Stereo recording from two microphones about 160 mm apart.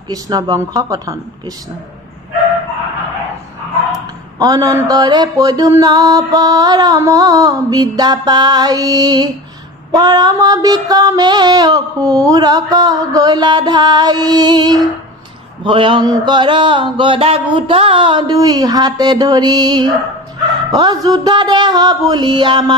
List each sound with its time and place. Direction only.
0.1 s mantra: 25° right (ahead or behind)
4.4 s mantra: 20° right (ahead or behind)